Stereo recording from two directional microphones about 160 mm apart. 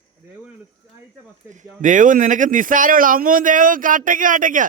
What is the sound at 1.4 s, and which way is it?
Speech, 50° right (ahead or behind).